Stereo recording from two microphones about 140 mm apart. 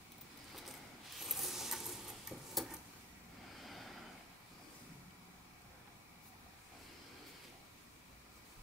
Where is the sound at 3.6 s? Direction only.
Centre (ahead or behind).